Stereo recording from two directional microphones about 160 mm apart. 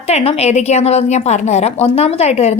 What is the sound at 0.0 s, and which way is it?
A woman's voice, 40° left (ahead or behind).